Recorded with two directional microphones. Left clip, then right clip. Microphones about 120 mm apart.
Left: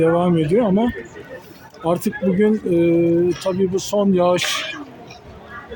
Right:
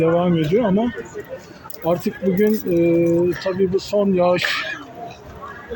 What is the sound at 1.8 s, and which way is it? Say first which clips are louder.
Speech: even; 45° left (ahead or behind).